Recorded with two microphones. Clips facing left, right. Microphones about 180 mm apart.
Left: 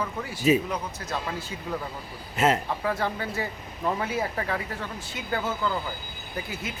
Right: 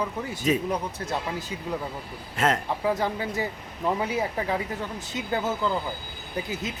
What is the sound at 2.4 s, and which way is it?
Speech, 5° left (ahead or behind).